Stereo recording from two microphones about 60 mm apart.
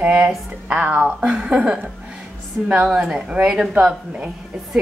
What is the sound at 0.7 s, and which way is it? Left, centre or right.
A woman's voice, right.